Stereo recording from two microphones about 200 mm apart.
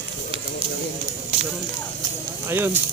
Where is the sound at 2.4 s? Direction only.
10° right (ahead or behind).